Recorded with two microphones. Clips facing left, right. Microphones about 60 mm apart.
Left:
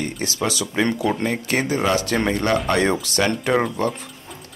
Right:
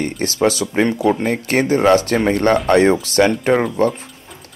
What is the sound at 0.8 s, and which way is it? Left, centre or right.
Speech, centre.